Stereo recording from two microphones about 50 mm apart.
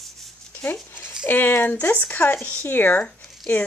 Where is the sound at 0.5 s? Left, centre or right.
Left.